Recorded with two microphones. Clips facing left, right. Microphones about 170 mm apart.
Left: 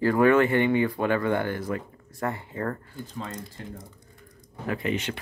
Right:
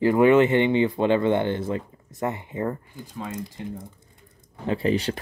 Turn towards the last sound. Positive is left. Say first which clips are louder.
# right 5 dB
turn(degrees=-35)  # may be behind; listen again after turning